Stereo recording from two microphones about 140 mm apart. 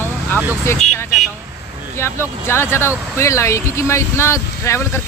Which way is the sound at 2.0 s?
15° left (ahead or behind).